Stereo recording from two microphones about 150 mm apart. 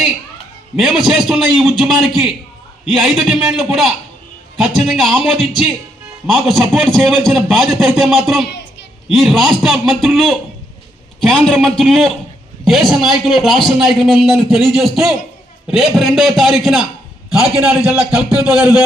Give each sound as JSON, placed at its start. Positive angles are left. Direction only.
{"t": 0.8, "sound": "a man's voice", "side_deg": 0}